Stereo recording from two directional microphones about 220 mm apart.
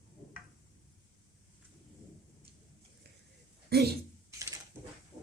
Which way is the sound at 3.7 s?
45° right (ahead or behind).